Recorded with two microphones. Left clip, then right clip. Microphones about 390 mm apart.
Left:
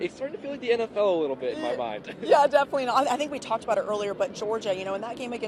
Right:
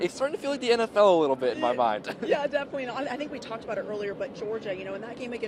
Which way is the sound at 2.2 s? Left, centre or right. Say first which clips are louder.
Left 8 dB; left.